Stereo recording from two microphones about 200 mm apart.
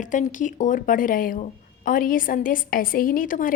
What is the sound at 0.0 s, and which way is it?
Speech, 40° left (ahead or behind).